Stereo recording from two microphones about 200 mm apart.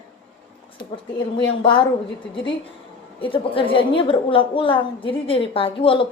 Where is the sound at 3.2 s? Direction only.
25° left (ahead or behind).